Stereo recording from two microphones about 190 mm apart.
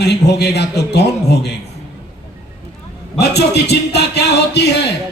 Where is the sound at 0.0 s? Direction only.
60° left (ahead or behind).